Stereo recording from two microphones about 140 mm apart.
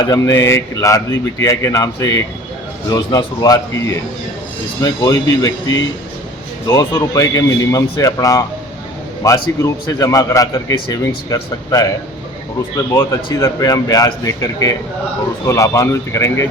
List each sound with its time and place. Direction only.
0.0 s a man's voice: 25° left (ahead or behind)